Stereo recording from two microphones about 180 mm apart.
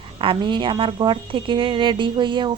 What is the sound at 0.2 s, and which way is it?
Speech, 25° right (ahead or behind).